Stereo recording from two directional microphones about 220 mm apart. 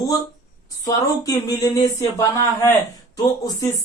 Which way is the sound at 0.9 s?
15° left (ahead or behind).